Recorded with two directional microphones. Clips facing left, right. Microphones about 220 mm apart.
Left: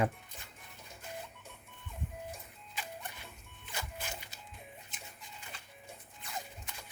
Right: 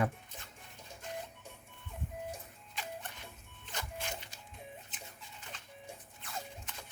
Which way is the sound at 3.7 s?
10° left (ahead or behind).